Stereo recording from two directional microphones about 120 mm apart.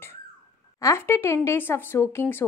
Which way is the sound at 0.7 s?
25° left (ahead or behind).